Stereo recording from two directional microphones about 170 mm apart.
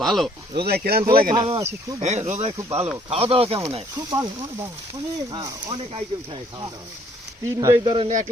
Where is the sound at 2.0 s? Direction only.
40° right (ahead or behind).